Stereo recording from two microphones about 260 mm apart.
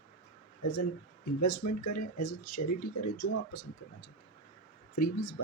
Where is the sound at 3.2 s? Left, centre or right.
Left.